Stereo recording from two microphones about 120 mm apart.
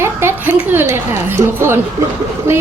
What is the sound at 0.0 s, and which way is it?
A woman's voice, 20° right (ahead or behind).